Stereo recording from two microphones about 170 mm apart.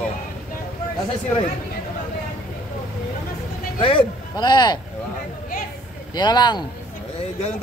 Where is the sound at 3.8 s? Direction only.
30° left (ahead or behind).